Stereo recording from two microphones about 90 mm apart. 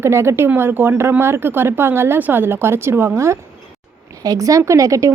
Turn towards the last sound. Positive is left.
turn(degrees=-35)  # may be behind; listen again after turning